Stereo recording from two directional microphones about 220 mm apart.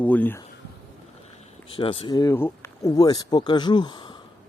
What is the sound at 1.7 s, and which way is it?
Speech, 25° left (ahead or behind).